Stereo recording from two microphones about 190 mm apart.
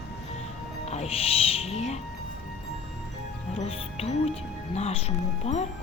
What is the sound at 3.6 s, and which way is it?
Speech, 30° left (ahead or behind).